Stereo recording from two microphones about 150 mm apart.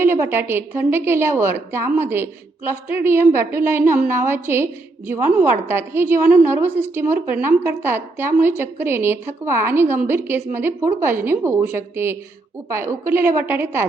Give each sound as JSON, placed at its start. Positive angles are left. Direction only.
{"t": 0.0, "sound": "a woman's voice", "side_deg": -15}